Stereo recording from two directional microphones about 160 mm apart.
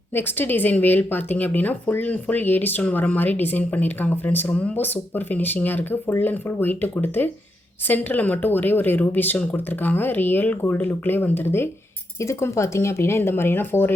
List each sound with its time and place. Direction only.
0.1 s speech: 15° left (ahead or behind)